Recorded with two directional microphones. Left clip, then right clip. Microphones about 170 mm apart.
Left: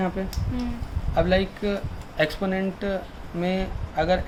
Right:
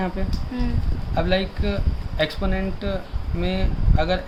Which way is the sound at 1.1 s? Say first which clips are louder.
Left 1 dB; 20° left (ahead or behind).